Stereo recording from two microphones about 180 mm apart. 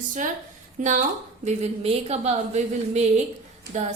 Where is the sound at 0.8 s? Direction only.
45° right (ahead or behind).